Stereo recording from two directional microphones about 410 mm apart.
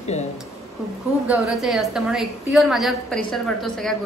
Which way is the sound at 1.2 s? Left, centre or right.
Centre.